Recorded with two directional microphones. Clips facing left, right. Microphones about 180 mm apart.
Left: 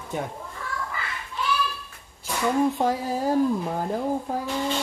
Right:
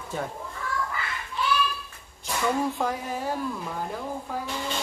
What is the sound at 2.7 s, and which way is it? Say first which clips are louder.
Speech: left 4 dB; 30° left (ahead or behind).